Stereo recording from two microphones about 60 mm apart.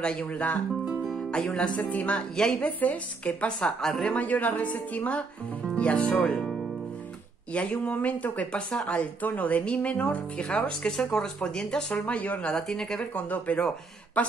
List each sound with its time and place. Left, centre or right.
0.0 s speech: centre
0.8 s music: centre
1.3 s music: centre
1.8 s speech: left
4.1 s speech: left
6.3 s music: centre
7.5 s speech: centre
12.5 s speech: centre
13.1 s speech: left